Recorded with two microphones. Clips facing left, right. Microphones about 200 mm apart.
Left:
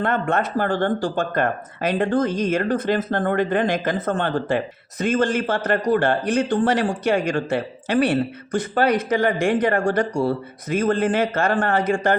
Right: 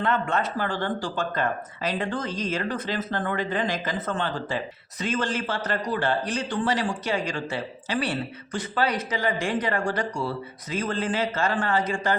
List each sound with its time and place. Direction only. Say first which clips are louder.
0.0 s speech: left 4 dB; 50° left (ahead or behind)